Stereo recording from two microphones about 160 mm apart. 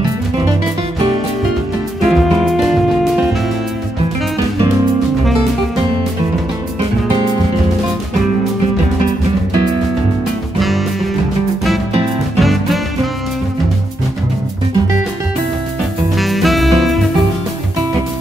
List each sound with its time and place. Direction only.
2.0 s music: centre (ahead or behind)
12.4 s music: centre (ahead or behind)
16.2 s music: centre (ahead or behind)